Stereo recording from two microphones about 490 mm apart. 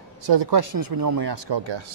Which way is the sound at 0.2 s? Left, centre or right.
Right.